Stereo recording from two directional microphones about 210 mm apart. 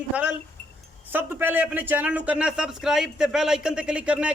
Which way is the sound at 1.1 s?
10° right (ahead or behind).